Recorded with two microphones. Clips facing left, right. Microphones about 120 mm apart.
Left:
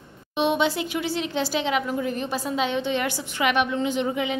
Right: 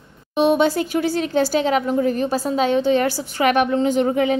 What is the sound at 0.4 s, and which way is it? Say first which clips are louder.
A woman's voice: right 6 dB; 40° right (ahead or behind).